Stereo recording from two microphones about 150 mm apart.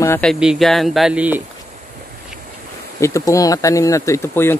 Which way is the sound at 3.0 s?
20° left (ahead or behind).